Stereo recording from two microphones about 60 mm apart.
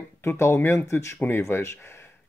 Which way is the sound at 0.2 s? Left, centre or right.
Left.